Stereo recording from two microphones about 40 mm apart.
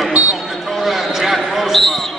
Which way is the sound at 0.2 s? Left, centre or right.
Right.